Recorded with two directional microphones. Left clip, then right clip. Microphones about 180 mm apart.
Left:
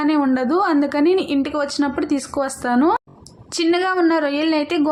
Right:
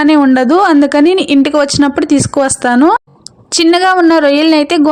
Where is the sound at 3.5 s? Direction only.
50° right (ahead or behind).